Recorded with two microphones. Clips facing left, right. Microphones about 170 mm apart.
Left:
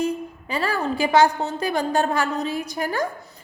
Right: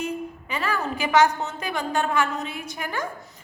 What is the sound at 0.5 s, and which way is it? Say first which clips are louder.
A woman's voice: left 4 dB; 35° left (ahead or behind).